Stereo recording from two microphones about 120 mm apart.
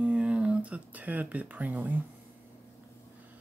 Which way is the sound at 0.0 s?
10° right (ahead or behind).